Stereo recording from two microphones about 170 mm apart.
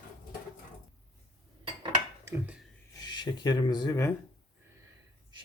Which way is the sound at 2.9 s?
25° left (ahead or behind).